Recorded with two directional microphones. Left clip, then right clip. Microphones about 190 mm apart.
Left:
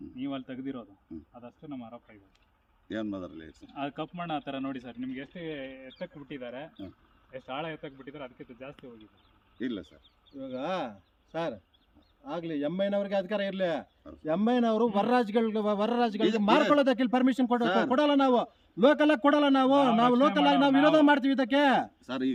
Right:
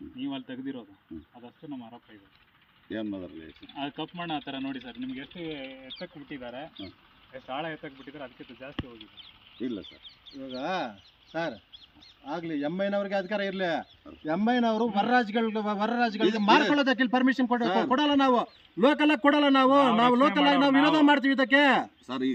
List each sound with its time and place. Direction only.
0.2 s speech: 50° left (ahead or behind)
2.9 s speech: 5° right (ahead or behind)
3.7 s a man's voice: 55° left (ahead or behind)
9.6 s speech: 5° left (ahead or behind)
10.6 s a man's voice: 35° left (ahead or behind)
17.6 s speech: 5° left (ahead or behind)
17.9 s a man's voice: 40° left (ahead or behind)
22.0 s speech: centre (ahead or behind)